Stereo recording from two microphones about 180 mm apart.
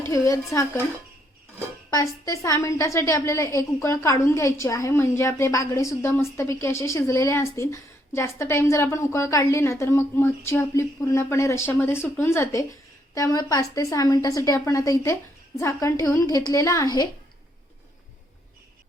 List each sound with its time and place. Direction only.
0.0 s a woman's voice: 15° left (ahead or behind)
1.9 s a woman's voice: 20° left (ahead or behind)